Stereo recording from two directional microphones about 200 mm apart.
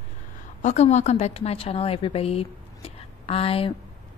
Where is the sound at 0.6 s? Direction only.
35° left (ahead or behind).